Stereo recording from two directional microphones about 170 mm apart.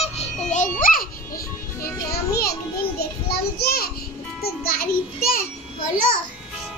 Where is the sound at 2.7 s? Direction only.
65° left (ahead or behind).